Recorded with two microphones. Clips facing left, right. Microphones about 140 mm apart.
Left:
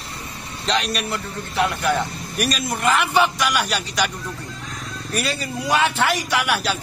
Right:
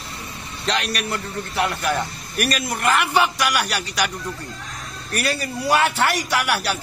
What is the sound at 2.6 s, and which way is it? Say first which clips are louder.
A man's voice: left 1 dB; centre (ahead or behind).